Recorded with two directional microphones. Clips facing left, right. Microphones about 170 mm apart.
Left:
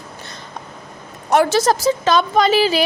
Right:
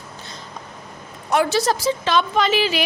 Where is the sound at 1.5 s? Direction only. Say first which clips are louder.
Left 4 dB; 45° left (ahead or behind).